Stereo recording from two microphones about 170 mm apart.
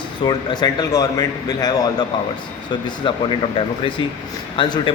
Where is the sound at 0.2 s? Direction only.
25° left (ahead or behind).